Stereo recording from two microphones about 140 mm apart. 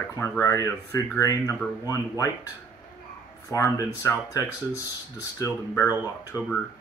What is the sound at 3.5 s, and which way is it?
Speech, 25° left (ahead or behind).